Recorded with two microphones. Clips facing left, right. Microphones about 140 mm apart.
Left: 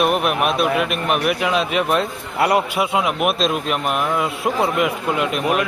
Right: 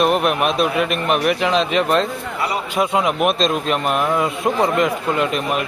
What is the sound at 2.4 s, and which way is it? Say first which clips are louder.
Speech: left 7 dB; 65° left (ahead or behind).